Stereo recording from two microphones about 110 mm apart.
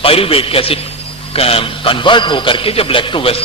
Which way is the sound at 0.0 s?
60° left (ahead or behind).